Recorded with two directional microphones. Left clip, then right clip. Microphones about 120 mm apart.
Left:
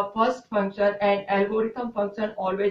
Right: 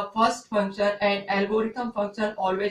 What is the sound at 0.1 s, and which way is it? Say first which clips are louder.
A woman's voice: right 1 dB; 15° left (ahead or behind).